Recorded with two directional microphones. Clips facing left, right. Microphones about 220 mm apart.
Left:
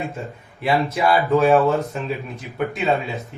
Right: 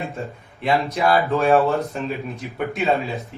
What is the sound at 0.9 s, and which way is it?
A man's voice, centre (ahead or behind).